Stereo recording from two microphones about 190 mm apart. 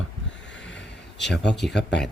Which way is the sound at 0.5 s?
70° left (ahead or behind).